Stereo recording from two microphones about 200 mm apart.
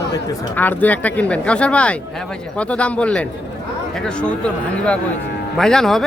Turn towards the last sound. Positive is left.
turn(degrees=0)  # may be behind; listen again after turning